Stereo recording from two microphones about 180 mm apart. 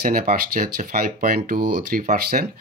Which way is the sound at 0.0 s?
50° right (ahead or behind).